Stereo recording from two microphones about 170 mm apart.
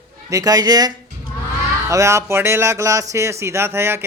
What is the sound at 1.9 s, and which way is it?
Speech, 15° right (ahead or behind).